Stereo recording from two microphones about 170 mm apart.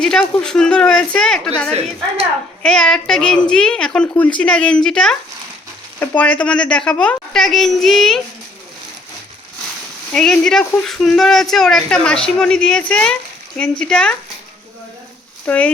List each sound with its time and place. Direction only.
0.0 s a woman's voice: 5° left (ahead or behind)
1.7 s a woman's voice: 40° right (ahead or behind)
2.6 s a woman's voice: 5° left (ahead or behind)
10.1 s a woman's voice: 5° left (ahead or behind)
15.4 s speech: 5° left (ahead or behind)